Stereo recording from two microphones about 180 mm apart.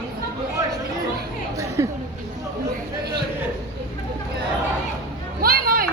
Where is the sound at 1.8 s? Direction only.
15° right (ahead or behind).